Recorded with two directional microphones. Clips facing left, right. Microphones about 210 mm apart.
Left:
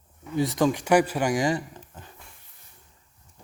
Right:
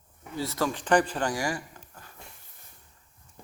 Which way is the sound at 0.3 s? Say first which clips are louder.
Left 7 dB; 15° left (ahead or behind).